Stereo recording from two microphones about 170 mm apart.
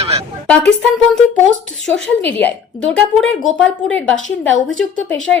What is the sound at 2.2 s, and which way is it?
A woman's voice, 10° left (ahead or behind).